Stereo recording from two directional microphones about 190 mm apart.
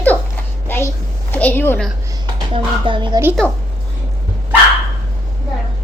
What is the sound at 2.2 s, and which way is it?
Speech, 25° right (ahead or behind).